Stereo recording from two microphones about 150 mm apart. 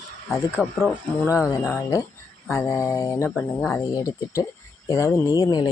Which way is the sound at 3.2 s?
10° left (ahead or behind).